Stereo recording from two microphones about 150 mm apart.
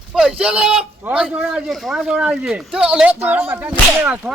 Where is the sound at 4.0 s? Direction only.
10° right (ahead or behind).